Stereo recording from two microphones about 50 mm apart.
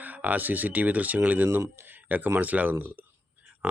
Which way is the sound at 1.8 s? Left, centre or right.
Right.